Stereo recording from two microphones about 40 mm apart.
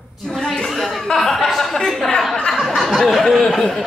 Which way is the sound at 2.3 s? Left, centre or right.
Centre.